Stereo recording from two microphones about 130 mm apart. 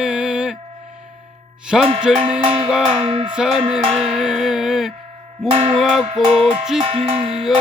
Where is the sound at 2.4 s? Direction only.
40° right (ahead or behind).